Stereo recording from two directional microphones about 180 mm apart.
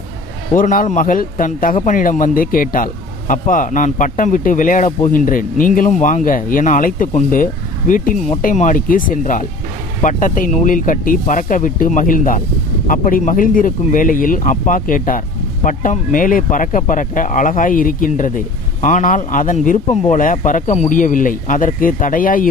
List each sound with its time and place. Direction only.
0.5 s speech: 50° left (ahead or behind)
4.9 s a man's voice: 30° left (ahead or behind)
5.1 s speech: 50° left (ahead or behind)